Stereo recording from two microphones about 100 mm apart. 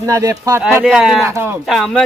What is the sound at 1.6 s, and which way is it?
Speech, centre (ahead or behind).